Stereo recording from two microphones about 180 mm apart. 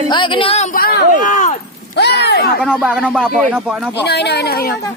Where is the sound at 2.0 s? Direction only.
70° left (ahead or behind).